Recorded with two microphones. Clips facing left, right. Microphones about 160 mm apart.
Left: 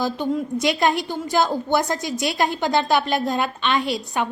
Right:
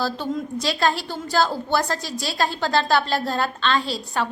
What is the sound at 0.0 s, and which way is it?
A woman's voice, 15° left (ahead or behind).